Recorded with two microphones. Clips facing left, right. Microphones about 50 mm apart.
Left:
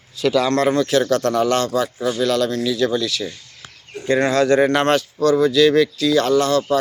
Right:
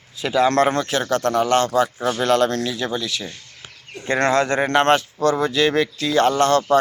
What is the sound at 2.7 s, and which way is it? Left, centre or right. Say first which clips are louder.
Speech: left 5 dB; centre.